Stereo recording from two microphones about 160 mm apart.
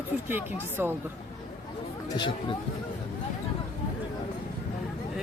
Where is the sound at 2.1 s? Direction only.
30° left (ahead or behind).